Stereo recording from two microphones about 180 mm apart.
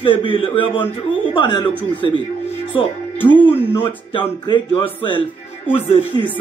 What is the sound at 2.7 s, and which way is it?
Speech, 25° left (ahead or behind).